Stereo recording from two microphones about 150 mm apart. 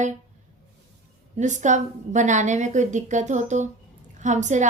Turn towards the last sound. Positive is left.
turn(degrees=-55)  # may be behind; listen again after turning